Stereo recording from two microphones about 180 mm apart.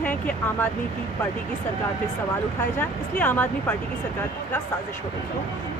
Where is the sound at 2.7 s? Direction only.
10° left (ahead or behind).